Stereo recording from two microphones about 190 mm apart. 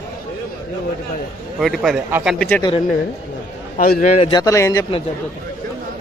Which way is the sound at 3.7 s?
50° left (ahead or behind).